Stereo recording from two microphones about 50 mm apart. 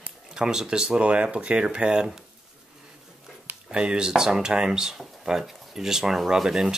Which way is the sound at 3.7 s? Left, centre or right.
Centre.